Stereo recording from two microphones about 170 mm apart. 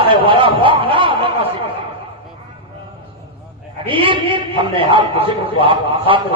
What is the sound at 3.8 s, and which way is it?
A man's voice, 30° right (ahead or behind).